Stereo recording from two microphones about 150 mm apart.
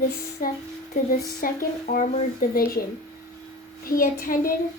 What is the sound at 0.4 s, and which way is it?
Child singing, 65° left (ahead or behind).